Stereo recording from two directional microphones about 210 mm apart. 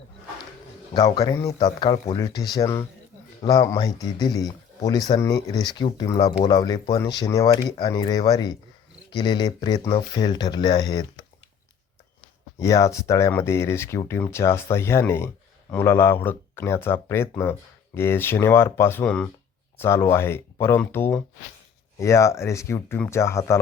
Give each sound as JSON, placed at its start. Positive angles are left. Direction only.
{"t": 0.9, "sound": "speech", "side_deg": 15}
{"t": 12.5, "sound": "speech", "side_deg": 15}